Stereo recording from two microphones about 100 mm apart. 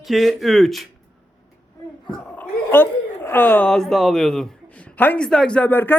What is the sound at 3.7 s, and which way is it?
Speech, 5° left (ahead or behind).